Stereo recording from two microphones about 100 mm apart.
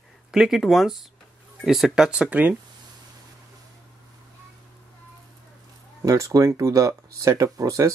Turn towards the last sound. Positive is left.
turn(degrees=-35)  # may be behind; listen again after turning